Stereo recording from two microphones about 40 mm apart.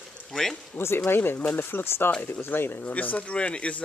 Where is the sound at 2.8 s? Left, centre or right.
Left.